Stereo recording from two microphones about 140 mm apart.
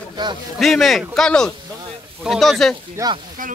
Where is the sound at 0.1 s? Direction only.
30° right (ahead or behind).